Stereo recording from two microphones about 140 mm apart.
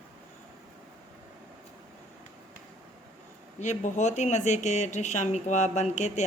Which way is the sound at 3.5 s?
55° left (ahead or behind).